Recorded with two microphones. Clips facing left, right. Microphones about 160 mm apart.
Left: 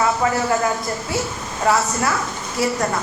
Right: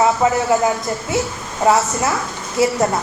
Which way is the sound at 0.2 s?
20° right (ahead or behind).